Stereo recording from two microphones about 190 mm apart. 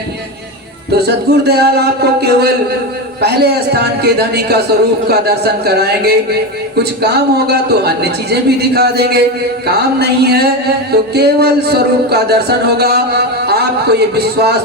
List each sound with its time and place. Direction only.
0.9 s speech: 60° right (ahead or behind)